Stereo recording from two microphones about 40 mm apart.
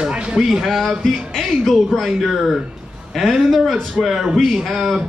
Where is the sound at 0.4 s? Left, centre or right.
Centre.